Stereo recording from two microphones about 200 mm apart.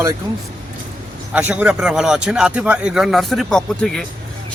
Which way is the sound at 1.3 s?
5° right (ahead or behind).